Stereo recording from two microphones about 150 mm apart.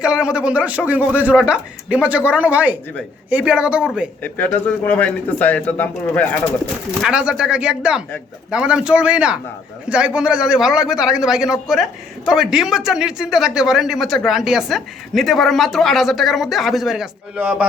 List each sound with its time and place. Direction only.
0.0 s speech: 5° right (ahead or behind)
4.2 s speech: 15° left (ahead or behind)
7.0 s a man's voice: 5° right (ahead or behind)